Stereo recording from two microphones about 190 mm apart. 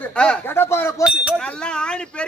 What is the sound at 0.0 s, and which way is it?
Speech, 5° left (ahead or behind).